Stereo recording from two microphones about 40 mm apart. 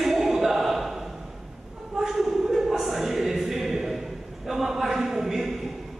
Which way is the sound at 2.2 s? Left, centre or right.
Centre.